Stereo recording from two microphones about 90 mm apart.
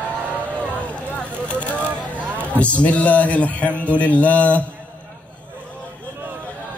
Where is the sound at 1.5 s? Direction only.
15° left (ahead or behind).